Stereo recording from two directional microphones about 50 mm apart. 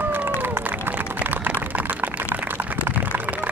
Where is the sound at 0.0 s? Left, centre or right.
Right.